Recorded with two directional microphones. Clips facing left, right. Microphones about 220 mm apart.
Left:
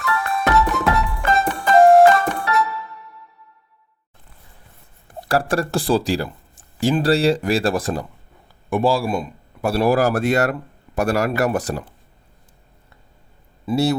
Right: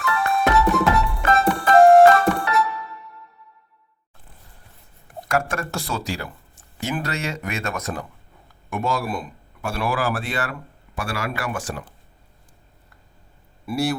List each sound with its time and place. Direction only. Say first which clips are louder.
0.0 s music: right 1 dB; centre (ahead or behind)
5.3 s a man's voice: left 5 dB; 35° left (ahead or behind)
13.7 s a man's voice: left 5 dB; 25° left (ahead or behind)